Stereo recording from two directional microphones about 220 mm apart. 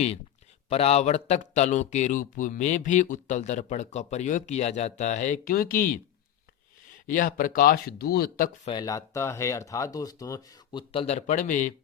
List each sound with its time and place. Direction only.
0.7 s speech: 30° left (ahead or behind)
7.1 s speech: 40° left (ahead or behind)
8.6 s speech: 20° left (ahead or behind); by 11.7 s 35° left (ahead or behind)